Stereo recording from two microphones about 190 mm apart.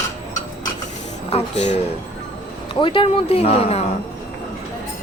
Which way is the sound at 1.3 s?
35° left (ahead or behind).